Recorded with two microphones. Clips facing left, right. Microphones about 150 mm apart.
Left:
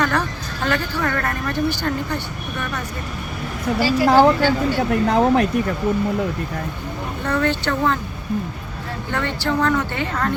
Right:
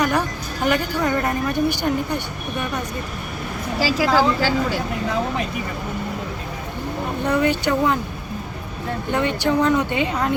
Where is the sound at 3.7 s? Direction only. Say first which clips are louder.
Left 2 dB; 90° right.